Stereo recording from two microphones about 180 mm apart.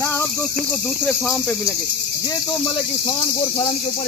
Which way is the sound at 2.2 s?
30° left (ahead or behind).